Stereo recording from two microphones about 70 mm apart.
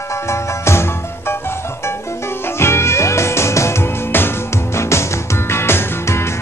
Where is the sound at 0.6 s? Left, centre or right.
Left.